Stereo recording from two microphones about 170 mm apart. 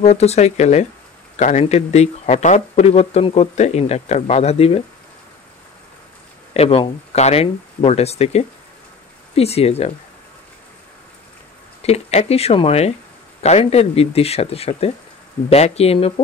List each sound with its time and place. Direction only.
0.0 s speech: 40° left (ahead or behind)
6.5 s speech: 35° left (ahead or behind)
11.8 s speech: 40° left (ahead or behind)